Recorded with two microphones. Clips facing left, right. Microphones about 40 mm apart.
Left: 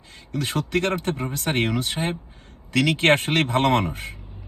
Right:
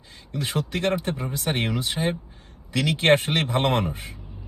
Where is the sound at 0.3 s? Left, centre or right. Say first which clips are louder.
Left 3 dB; left.